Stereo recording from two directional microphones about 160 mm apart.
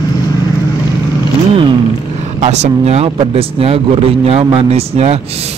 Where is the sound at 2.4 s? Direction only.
45° right (ahead or behind).